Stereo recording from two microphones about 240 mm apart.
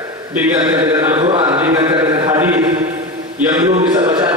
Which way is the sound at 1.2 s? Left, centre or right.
Right.